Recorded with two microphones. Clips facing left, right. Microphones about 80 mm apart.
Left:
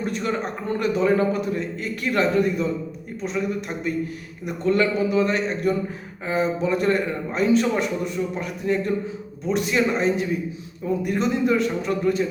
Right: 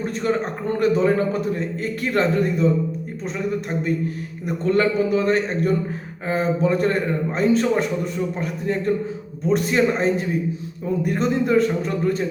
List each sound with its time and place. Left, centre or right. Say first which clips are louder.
0.0 s a man's voice: right 3 dB; right